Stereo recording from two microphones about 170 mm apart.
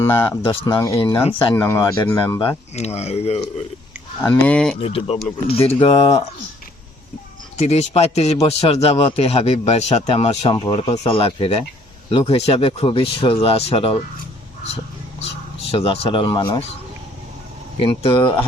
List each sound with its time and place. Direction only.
0.0 s speech: 15° left (ahead or behind); by 1.4 s 30° left (ahead or behind)
1.5 s speech: 15° left (ahead or behind)
2.7 s speech: 40° left (ahead or behind)
4.2 s speech: 10° left (ahead or behind)
4.8 s speech: 35° left (ahead or behind)
7.6 s speech: 40° left (ahead or behind)
15.7 s speech: 35° left (ahead or behind)
17.7 s speech: 30° left (ahead or behind)